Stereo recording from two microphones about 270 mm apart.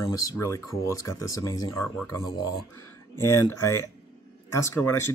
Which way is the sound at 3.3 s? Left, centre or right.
Left.